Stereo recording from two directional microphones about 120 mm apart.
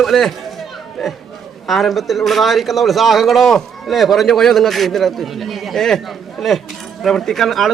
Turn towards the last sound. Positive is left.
turn(degrees=0)  # may be behind; listen again after turning